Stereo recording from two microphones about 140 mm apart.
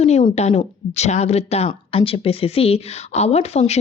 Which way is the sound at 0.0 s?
50° left (ahead or behind).